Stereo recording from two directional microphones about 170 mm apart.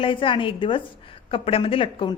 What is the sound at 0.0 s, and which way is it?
A woman's voice, 30° left (ahead or behind).